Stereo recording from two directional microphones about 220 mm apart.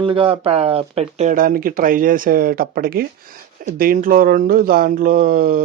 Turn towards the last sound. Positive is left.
turn(degrees=-40)  # may be behind; listen again after turning